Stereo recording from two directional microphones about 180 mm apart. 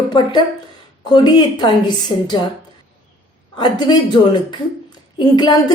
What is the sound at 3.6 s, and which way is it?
A woman's voice, 25° left (ahead or behind).